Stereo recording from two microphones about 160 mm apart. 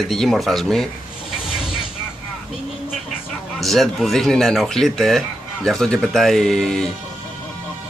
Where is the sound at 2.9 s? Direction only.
Centre (ahead or behind).